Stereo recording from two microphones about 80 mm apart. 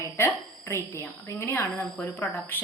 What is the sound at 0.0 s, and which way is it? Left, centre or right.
A woman's voice, left.